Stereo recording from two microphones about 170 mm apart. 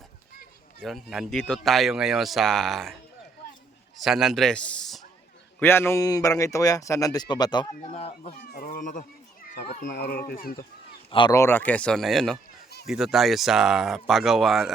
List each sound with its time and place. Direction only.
0.8 s speech: centre (ahead or behind); by 8.1 s 35° left (ahead or behind)
8.2 s speech: 60° left (ahead or behind)
9.8 s speech: 60° left (ahead or behind)
11.3 s speech: 15° left (ahead or behind); by 14.7 s centre (ahead or behind)